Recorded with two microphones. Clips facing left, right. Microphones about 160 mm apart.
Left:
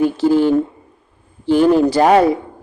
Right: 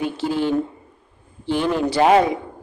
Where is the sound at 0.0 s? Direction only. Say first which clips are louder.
Left 8 dB; 40° left (ahead or behind).